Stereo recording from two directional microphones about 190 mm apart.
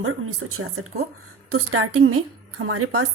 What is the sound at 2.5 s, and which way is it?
Speech, 90° right.